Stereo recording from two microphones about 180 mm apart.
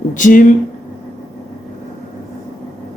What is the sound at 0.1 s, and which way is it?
Speech, 45° left (ahead or behind).